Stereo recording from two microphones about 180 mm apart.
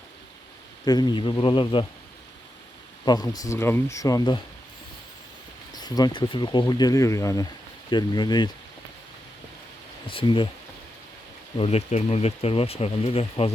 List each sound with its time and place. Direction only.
0.9 s speech: 25° left (ahead or behind)
3.0 s speech: 20° left (ahead or behind)
5.7 s speech: 20° left (ahead or behind)
10.1 s speech: 30° left (ahead or behind)
11.5 s speech: 35° left (ahead or behind)